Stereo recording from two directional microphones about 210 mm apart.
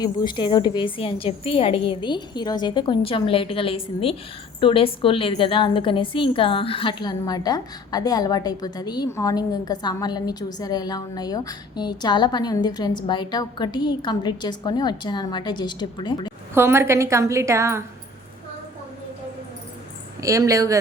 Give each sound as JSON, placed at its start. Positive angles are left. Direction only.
{"t": 0.0, "sound": "a woman's voice", "side_deg": 20}
{"t": 16.6, "sound": "a woman's voice", "side_deg": -10}
{"t": 20.2, "sound": "a woman's voice", "side_deg": -15}